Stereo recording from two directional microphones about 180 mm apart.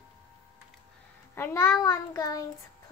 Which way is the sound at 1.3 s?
15° left (ahead or behind).